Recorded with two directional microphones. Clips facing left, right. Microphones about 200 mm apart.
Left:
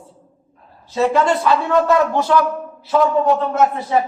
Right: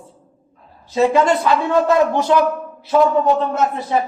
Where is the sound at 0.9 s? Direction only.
15° right (ahead or behind).